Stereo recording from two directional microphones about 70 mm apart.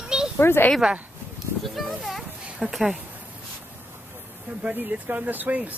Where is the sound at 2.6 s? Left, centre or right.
Centre.